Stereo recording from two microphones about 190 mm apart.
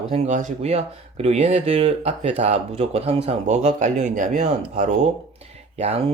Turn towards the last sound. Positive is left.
turn(degrees=-35)  # may be behind; listen again after turning